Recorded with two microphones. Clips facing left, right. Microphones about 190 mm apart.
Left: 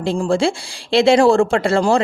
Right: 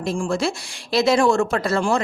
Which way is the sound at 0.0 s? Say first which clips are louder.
Left 5 dB; 30° left (ahead or behind).